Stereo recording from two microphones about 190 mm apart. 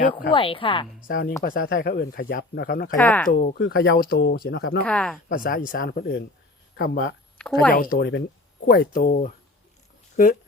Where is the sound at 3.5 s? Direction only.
70° left (ahead or behind).